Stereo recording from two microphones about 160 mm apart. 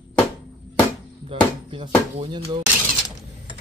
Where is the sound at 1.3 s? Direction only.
35° right (ahead or behind).